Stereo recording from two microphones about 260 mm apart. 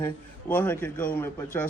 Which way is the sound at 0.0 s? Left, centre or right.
Centre.